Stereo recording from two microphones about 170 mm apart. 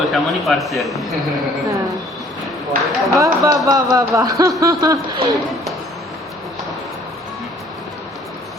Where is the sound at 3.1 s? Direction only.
20° right (ahead or behind).